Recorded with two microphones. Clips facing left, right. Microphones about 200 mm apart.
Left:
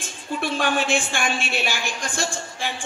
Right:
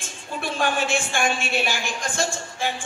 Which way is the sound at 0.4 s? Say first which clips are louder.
Left 1 dB; 50° right (ahead or behind).